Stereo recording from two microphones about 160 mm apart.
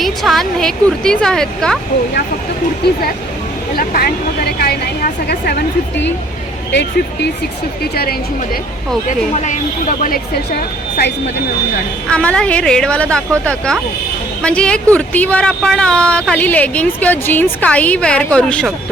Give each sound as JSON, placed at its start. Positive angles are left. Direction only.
{"t": 0.0, "sound": "speech", "side_deg": 0}
{"t": 2.8, "sound": "speech", "side_deg": 85}
{"t": 3.8, "sound": "speech", "side_deg": 65}
{"t": 5.3, "sound": "speech", "side_deg": 75}
{"t": 6.7, "sound": "speech", "side_deg": 90}
{"t": 9.0, "sound": "a woman's voice", "side_deg": 50}
{"t": 12.1, "sound": "speech", "side_deg": 5}